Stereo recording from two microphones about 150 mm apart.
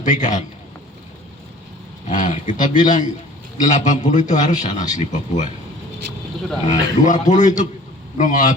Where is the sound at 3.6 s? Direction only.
55° left (ahead or behind).